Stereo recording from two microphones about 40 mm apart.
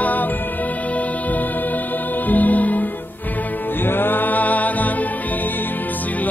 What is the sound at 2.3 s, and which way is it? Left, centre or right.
Music, left.